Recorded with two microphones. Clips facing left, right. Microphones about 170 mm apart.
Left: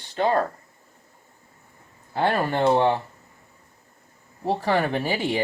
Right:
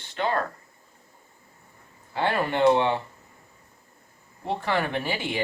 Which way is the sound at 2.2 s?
40° left (ahead or behind).